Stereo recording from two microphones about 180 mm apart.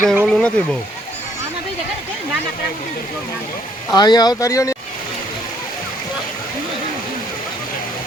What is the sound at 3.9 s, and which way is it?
Speech, 20° left (ahead or behind).